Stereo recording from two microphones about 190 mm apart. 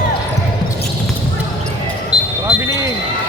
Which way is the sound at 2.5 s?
15° right (ahead or behind).